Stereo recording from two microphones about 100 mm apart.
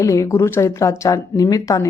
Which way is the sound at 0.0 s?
30° left (ahead or behind).